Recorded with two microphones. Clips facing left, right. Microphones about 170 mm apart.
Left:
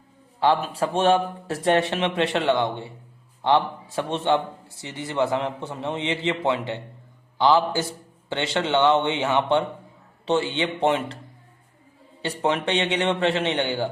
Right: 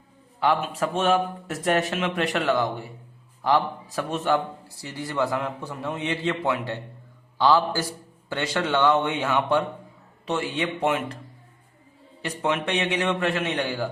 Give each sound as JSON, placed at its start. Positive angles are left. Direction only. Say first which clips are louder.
{"t": 0.3, "sound": "a man's voice", "louder": "left 2 dB", "side_deg": 30}
{"t": 12.2, "sound": "a man's voice", "louder": "left 2 dB", "side_deg": 30}